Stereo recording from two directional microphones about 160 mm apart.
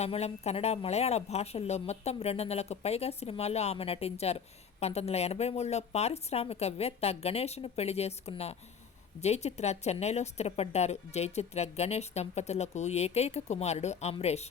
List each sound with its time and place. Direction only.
0.0 s a woman's voice: 40° left (ahead or behind)